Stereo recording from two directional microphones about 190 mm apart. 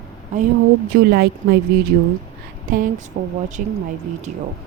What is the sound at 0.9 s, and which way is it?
Speech, 55° right (ahead or behind).